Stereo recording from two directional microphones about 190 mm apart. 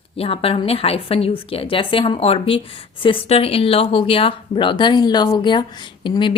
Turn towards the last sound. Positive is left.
turn(degrees=25)  # may be behind; listen again after turning